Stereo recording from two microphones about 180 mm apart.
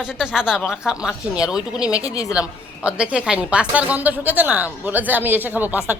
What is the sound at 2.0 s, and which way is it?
Speech, 20° left (ahead or behind).